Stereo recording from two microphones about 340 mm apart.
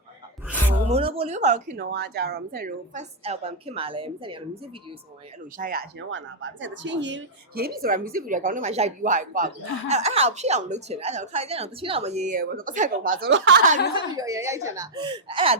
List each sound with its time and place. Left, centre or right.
0.9 s a woman's voice: centre
5.5 s a woman's voice: right
13.9 s speech: centre